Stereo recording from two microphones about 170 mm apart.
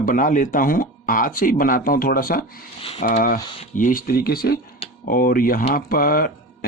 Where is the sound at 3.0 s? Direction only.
55° left (ahead or behind).